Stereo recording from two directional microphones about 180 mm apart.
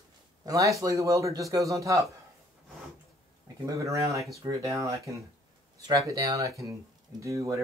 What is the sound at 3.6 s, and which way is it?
Speech, 15° right (ahead or behind).